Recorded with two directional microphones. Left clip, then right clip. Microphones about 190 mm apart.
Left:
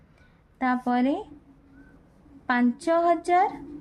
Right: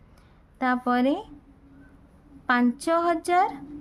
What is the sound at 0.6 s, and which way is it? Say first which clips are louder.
Speech: right 1 dB; 25° right (ahead or behind).